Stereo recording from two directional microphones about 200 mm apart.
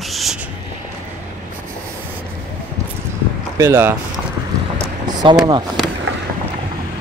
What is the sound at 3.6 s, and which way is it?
Speech, 10° right (ahead or behind).